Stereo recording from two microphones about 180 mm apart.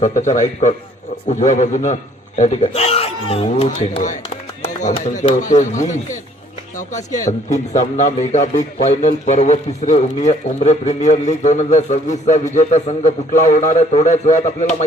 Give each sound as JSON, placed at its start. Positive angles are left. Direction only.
{"t": 0.0, "sound": "a man's voice", "side_deg": 45}
{"t": 7.3, "sound": "a man's voice", "side_deg": 40}